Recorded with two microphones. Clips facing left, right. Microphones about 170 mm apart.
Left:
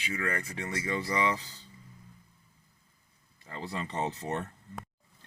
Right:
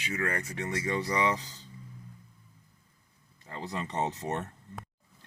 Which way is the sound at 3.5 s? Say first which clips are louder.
Right 1 dB; 20° right (ahead or behind).